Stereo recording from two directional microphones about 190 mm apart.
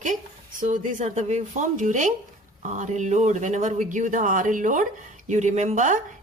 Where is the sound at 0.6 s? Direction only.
40° right (ahead or behind).